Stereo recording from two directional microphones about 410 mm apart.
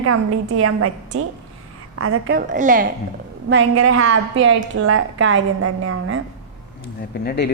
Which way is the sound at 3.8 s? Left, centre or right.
Right.